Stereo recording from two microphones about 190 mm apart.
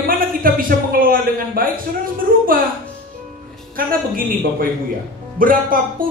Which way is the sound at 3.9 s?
50° right (ahead or behind).